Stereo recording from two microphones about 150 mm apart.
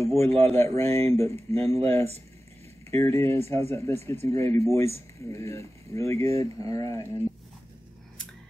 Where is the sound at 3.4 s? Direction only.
45° right (ahead or behind).